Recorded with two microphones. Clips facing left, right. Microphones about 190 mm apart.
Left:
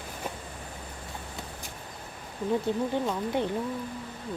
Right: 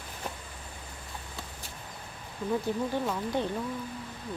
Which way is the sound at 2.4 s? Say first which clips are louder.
Left 2 dB; 20° left (ahead or behind).